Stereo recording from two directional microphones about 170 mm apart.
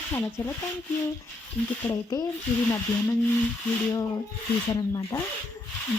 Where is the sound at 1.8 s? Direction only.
20° left (ahead or behind).